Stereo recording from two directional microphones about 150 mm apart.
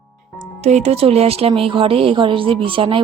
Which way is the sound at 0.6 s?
45° right (ahead or behind).